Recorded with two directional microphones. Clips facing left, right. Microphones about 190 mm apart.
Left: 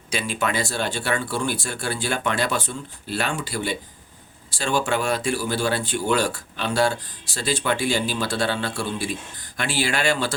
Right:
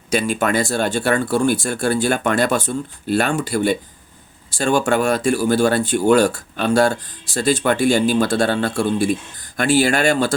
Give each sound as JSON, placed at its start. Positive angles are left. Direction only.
{"t": 0.1, "sound": "speech", "side_deg": -45}